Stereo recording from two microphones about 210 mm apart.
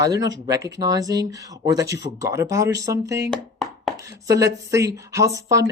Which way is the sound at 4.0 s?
15° right (ahead or behind).